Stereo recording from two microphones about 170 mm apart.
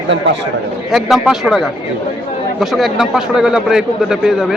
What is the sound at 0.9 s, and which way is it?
A man's voice, centre (ahead or behind).